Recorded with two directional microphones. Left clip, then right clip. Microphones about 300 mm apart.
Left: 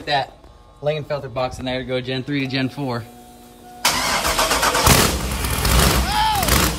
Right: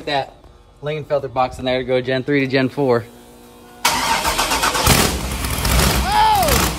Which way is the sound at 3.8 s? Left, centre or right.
Centre.